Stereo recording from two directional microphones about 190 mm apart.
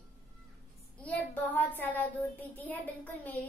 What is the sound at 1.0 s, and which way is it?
A child's voice, 10° left (ahead or behind).